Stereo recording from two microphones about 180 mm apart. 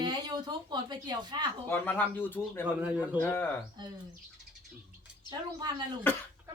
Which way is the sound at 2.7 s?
10° right (ahead or behind).